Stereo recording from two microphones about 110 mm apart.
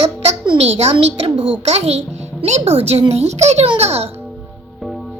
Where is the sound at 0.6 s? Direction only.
70° right (ahead or behind).